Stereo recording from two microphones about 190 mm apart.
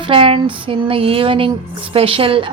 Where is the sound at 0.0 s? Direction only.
30° right (ahead or behind).